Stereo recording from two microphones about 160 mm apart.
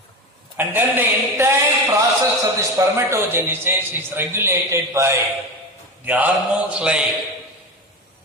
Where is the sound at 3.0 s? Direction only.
15° right (ahead or behind).